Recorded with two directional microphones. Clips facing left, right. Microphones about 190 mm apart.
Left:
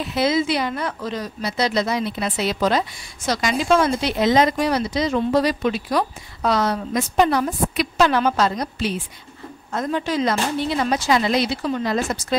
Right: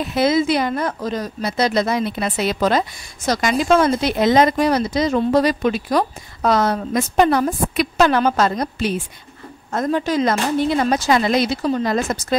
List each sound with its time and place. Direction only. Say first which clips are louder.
0.0 s speech: right 3 dB; 50° right (ahead or behind)